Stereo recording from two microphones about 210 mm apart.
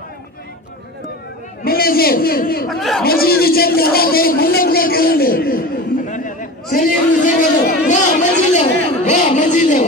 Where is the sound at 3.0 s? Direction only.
45° left (ahead or behind).